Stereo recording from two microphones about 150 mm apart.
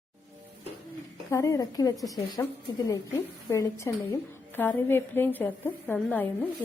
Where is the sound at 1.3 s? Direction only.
20° left (ahead or behind).